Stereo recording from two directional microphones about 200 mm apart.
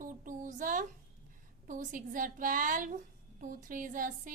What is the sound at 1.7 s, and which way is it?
A woman's voice, 40° right (ahead or behind).